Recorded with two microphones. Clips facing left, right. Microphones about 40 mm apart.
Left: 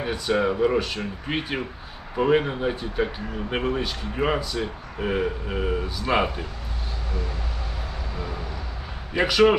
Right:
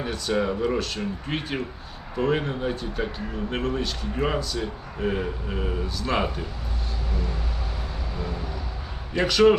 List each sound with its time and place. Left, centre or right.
0.0 s speech: centre
9.1 s speech: centre